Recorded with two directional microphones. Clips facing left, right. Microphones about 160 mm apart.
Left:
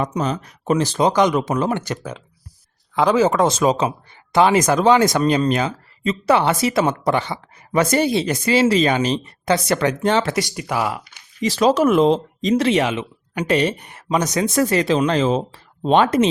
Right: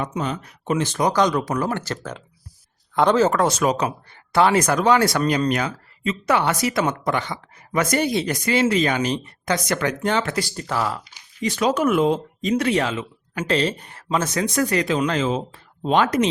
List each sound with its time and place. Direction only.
0.0 s speech: 40° left (ahead or behind)
0.9 s speech: 20° left (ahead or behind)
2.9 s speech: 5° left (ahead or behind); by 10.4 s 25° left (ahead or behind)
10.5 s speech: 10° left (ahead or behind)
11.5 s speech: 35° left (ahead or behind)
12.5 s speech: 25° left (ahead or behind)